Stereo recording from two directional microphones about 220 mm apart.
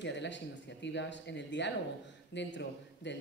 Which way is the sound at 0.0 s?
55° left (ahead or behind).